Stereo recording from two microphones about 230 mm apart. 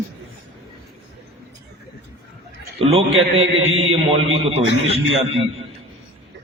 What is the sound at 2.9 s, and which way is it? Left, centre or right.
A man's voice, right.